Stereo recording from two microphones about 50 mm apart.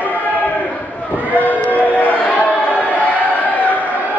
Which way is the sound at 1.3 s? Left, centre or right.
Left.